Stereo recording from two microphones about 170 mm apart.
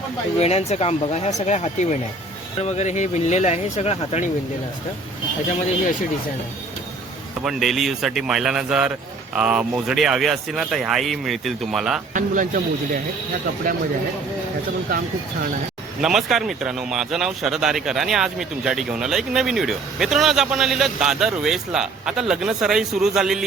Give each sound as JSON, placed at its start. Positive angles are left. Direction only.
{"t": 0.3, "sound": "speech", "side_deg": 40}
{"t": 7.4, "sound": "speech", "side_deg": 0}
{"t": 12.1, "sound": "speech", "side_deg": -50}
{"t": 14.8, "sound": "speech", "side_deg": -60}
{"t": 16.0, "sound": "speech", "side_deg": 0}